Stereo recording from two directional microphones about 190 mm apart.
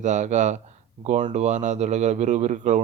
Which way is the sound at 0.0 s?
40° right (ahead or behind).